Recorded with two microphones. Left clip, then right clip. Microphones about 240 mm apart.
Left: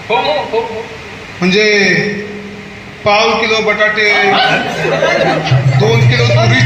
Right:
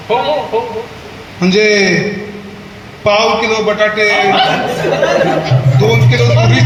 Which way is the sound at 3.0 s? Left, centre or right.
Right.